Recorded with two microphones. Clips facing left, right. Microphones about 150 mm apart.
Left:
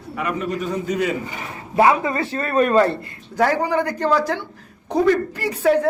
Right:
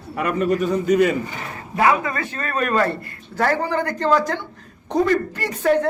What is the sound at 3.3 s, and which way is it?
Speech, 15° left (ahead or behind).